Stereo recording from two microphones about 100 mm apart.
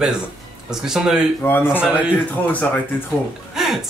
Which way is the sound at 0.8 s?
5° right (ahead or behind).